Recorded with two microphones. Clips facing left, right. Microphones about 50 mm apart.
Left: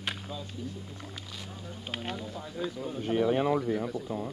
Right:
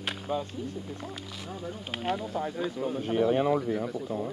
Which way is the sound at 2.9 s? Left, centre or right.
Centre.